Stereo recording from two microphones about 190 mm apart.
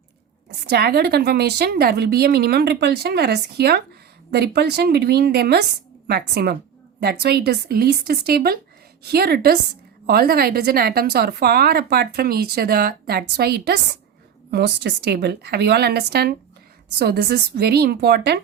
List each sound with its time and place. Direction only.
0.4 s speech: 60° right (ahead or behind)